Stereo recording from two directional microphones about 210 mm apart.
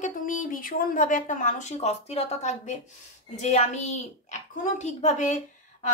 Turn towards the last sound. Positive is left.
turn(degrees=35)  # may be behind; listen again after turning